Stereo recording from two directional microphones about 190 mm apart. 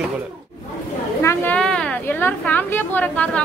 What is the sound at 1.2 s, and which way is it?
A woman's voice, 10° left (ahead or behind).